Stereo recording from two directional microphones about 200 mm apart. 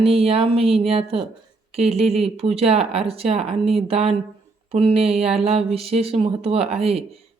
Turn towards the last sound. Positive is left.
turn(degrees=-30)  # may be behind; listen again after turning